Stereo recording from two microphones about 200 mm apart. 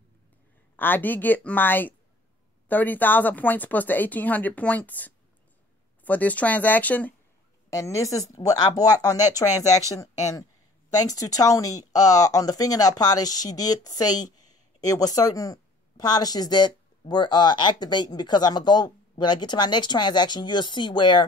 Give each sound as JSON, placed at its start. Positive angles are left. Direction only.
{"t": 0.7, "sound": "speech", "side_deg": 10}